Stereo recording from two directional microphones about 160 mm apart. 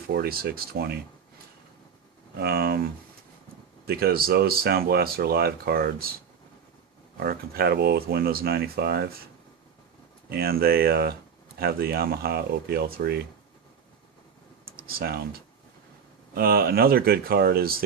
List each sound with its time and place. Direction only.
0.1 s speech: 80° right
2.4 s speech: 70° right (ahead or behind)
3.8 s speech: 70° right (ahead or behind)
7.2 s speech: 75° right (ahead or behind)
10.2 s speech: 70° right (ahead or behind)
14.8 s speech: 70° right (ahead or behind)